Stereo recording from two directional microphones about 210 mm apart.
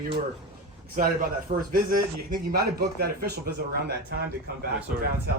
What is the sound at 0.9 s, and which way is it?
A man's voice, 40° right (ahead or behind).